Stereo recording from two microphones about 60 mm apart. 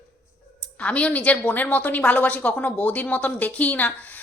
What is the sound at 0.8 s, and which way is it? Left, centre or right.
A woman's voice, left.